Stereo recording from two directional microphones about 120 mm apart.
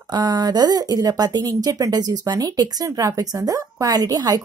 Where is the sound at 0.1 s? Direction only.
35° right (ahead or behind).